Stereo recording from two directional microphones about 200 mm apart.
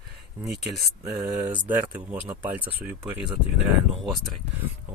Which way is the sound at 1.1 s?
20° right (ahead or behind).